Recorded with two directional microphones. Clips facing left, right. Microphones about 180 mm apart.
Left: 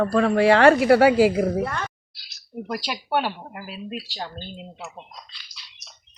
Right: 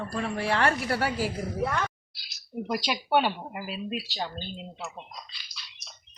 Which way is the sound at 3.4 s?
5° right (ahead or behind).